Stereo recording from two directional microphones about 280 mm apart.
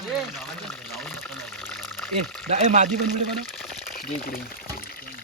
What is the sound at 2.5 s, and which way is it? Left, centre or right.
Speech, right.